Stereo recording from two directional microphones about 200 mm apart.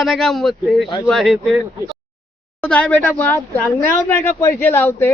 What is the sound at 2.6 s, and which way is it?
Speech, 5° left (ahead or behind).